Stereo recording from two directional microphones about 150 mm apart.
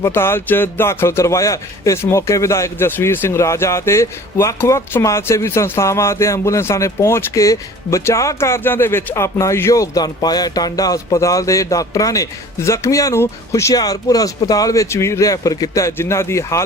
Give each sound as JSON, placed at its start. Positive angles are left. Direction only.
{"t": 0.0, "sound": "a man's voice", "side_deg": 15}